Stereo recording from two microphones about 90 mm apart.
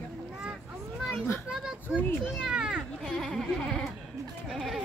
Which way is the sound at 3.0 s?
5° left (ahead or behind).